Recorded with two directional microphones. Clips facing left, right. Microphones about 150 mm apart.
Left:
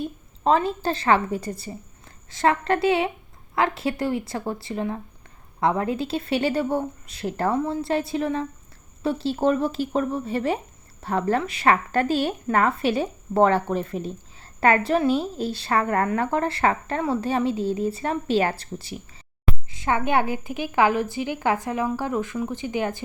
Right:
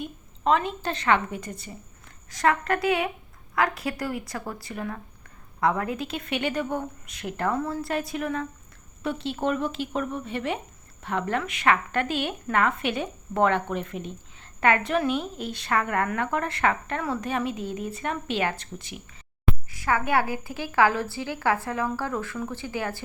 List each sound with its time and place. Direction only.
0.0 s a woman's voice: 35° left (ahead or behind)
19.7 s a woman's voice: 25° left (ahead or behind)